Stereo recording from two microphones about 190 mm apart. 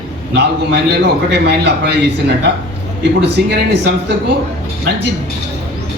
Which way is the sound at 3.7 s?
65° right (ahead or behind).